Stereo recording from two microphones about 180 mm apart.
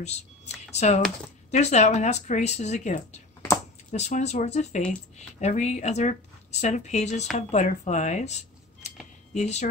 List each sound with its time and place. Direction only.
0.7 s speech: 40° left (ahead or behind)